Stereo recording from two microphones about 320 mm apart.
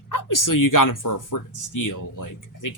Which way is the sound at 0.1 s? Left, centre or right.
Left.